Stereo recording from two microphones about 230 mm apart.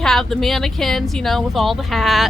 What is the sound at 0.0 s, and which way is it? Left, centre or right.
Speech, centre.